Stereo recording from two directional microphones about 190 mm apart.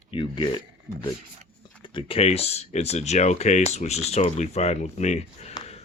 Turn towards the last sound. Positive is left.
turn(degrees=35)  # may be behind; listen again after turning